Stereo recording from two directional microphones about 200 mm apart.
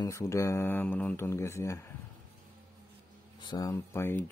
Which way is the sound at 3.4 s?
20° left (ahead or behind).